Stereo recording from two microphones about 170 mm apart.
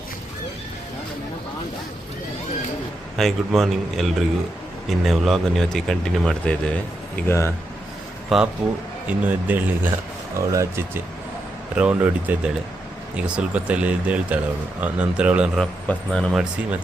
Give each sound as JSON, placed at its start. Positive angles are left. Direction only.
{"t": 3.2, "sound": "speech", "side_deg": 0}
{"t": 7.3, "sound": "speech", "side_deg": 15}
{"t": 8.3, "sound": "speech", "side_deg": 0}